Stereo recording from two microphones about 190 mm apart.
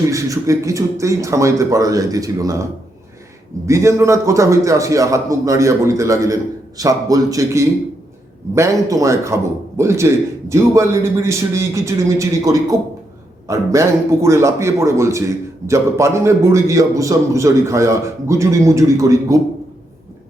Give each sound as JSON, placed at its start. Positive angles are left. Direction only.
{"t": 0.1, "sound": "speech", "side_deg": -15}
{"t": 3.7, "sound": "speech", "side_deg": -15}